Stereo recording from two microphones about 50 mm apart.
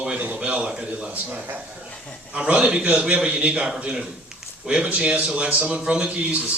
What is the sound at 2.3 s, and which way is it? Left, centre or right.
A man's voice, right.